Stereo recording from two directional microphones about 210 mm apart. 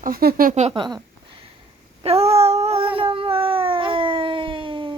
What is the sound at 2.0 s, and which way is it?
Child singing, 30° right (ahead or behind).